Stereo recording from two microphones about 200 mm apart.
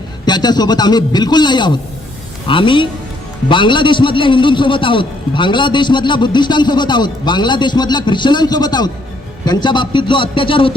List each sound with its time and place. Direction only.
0.3 s a man's voice: 20° left (ahead or behind)